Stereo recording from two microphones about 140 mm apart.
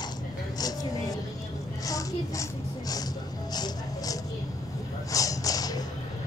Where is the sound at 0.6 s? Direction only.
25° left (ahead or behind).